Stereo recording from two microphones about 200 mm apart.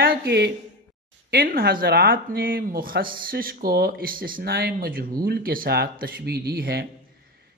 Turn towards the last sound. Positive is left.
turn(degrees=-50)  # may be behind; listen again after turning